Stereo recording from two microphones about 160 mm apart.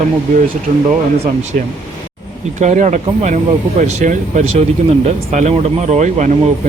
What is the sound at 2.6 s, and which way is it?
Speech, 50° right (ahead or behind).